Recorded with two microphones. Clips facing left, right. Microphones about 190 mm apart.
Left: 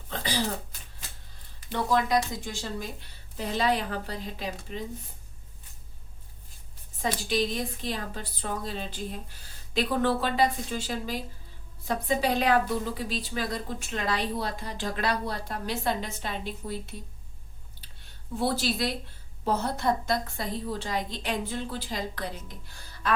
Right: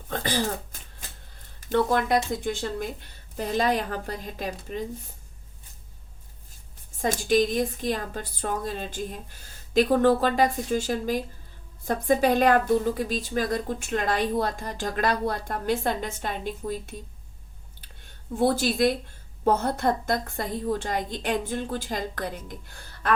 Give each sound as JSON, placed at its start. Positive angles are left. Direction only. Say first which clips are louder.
{"t": 0.1, "sound": "throat clearing", "louder": "right 3 dB", "side_deg": -50}
{"t": 1.6, "sound": "a woman's voice", "louder": "right 4 dB", "side_deg": -50}
{"t": 7.0, "sound": "a woman's voice", "louder": "right 6 dB", "side_deg": -45}
{"t": 17.7, "sound": "a sound", "louder": "right 5 dB", "side_deg": -50}
{"t": 19.5, "sound": "a woman's voice", "louder": "right 4 dB", "side_deg": -50}